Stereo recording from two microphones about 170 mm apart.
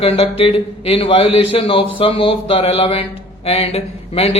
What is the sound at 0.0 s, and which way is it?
A man's voice, 35° left (ahead or behind).